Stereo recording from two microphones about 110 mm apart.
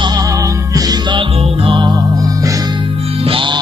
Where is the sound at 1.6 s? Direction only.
50° right (ahead or behind).